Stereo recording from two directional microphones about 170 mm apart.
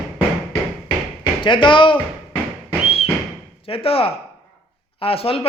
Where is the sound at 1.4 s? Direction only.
30° left (ahead or behind).